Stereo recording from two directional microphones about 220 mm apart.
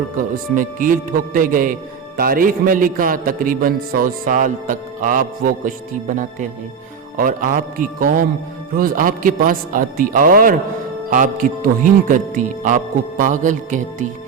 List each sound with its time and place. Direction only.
0.5 s a man's voice: 40° right (ahead or behind)